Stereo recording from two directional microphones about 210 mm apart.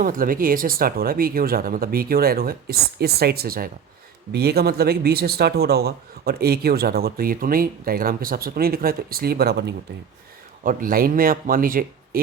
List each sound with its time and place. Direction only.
0.0 s speech: 40° right (ahead or behind)